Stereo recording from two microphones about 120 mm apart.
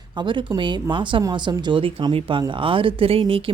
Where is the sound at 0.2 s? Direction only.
40° right (ahead or behind).